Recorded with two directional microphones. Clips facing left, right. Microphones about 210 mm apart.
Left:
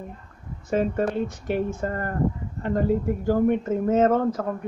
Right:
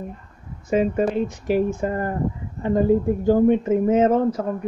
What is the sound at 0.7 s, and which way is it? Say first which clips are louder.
Speech: right 3 dB; 10° right (ahead or behind).